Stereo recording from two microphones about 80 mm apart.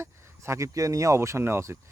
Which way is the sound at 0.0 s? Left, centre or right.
Right.